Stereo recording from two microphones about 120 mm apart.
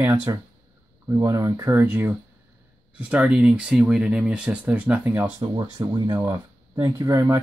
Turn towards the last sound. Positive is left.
turn(degrees=-25)  # may be behind; listen again after turning